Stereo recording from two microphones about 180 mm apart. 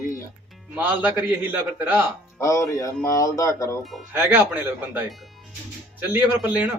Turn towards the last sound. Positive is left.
turn(degrees=-5)  # may be behind; listen again after turning